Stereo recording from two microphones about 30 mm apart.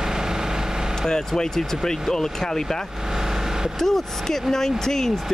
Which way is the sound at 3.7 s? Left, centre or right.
Centre.